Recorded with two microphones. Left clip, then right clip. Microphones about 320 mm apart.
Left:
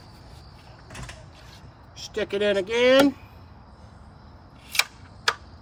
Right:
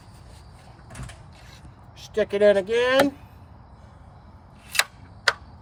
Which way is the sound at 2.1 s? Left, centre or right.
Centre.